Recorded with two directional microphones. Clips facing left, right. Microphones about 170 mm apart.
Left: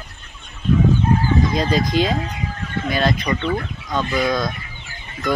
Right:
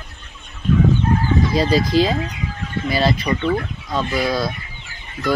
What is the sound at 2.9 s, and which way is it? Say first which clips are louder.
Speech: right 1 dB; 5° right (ahead or behind).